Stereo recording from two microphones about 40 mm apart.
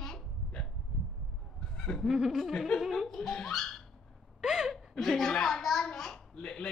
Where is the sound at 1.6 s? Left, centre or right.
Centre.